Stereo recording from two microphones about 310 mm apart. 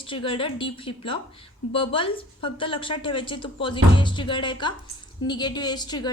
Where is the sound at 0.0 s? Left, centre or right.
Centre.